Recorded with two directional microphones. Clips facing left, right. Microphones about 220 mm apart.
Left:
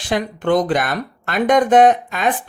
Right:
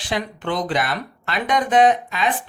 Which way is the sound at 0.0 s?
50° left (ahead or behind).